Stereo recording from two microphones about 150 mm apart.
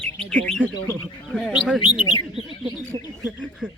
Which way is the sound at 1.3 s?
5° right (ahead or behind).